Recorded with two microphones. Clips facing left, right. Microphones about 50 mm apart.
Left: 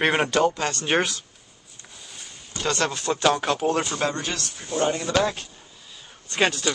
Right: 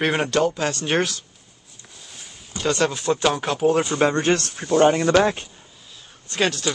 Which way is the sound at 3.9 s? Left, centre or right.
Right.